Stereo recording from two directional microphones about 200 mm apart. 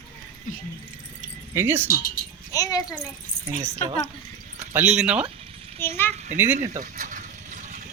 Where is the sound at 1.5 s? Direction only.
10° right (ahead or behind).